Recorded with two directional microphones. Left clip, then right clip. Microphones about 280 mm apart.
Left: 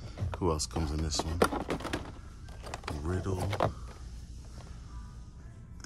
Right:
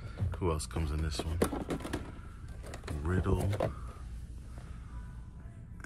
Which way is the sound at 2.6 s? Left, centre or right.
Centre.